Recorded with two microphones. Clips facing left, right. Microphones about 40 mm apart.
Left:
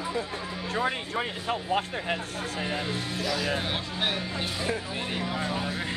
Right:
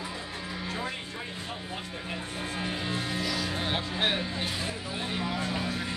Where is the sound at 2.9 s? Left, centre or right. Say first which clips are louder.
Even; centre.